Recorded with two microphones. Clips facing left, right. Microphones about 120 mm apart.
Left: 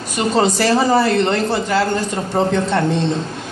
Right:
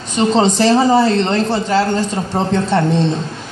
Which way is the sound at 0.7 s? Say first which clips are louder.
Right 2 dB; 15° right (ahead or behind).